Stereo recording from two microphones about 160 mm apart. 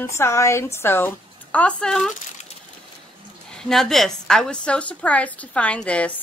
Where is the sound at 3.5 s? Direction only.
Centre (ahead or behind).